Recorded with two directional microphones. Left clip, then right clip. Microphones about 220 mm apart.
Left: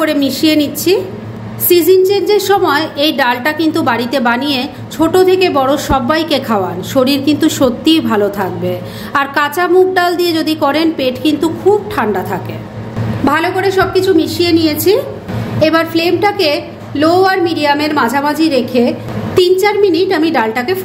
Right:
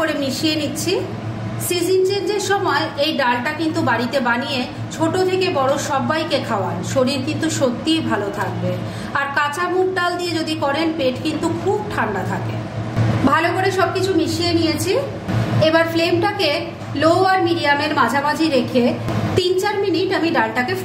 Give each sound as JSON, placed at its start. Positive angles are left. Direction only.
{"t": 0.0, "sound": "a woman's voice", "side_deg": 35}